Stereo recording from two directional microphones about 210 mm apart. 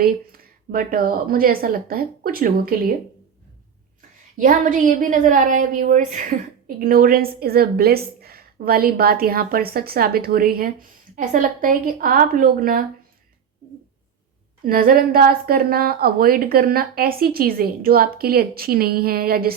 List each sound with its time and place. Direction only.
0.0 s a woman's voice: 45° right (ahead or behind)
4.4 s a woman's voice: 40° right (ahead or behind)
14.6 s a woman's voice: 45° right (ahead or behind)